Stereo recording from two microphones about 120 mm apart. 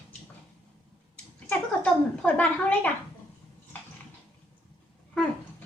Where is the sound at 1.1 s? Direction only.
10° left (ahead or behind).